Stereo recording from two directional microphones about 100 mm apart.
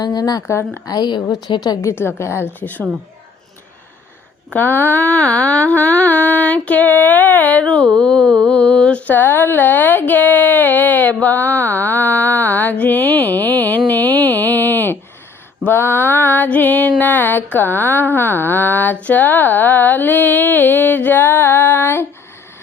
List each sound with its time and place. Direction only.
0.0 s speech: 40° left (ahead or behind)
0.9 s speech: 45° left (ahead or behind)
1.8 s speech: 25° left (ahead or behind)
4.5 s a sound: 20° left (ahead or behind)
15.6 s speech: 20° left (ahead or behind)